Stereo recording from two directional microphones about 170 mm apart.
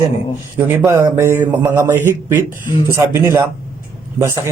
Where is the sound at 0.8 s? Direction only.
15° right (ahead or behind).